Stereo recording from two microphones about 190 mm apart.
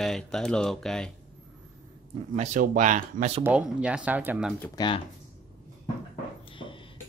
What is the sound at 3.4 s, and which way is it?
Speech, 5° right (ahead or behind).